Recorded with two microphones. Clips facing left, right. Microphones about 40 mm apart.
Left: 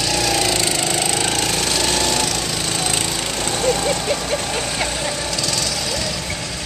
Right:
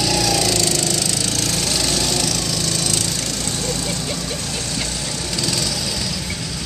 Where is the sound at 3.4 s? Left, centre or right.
Left.